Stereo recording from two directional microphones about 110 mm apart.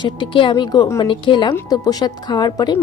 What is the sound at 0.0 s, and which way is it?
Speech, 50° left (ahead or behind).